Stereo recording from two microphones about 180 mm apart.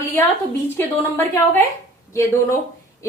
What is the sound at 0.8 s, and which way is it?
Speech, 10° left (ahead or behind).